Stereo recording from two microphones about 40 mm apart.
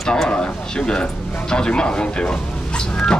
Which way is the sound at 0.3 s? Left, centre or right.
Left.